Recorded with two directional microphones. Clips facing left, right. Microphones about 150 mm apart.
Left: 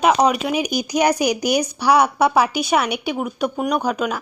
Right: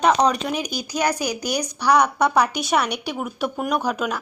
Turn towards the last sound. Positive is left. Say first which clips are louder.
# left 2 dB
turn(degrees=0)  # may be behind; listen again after turning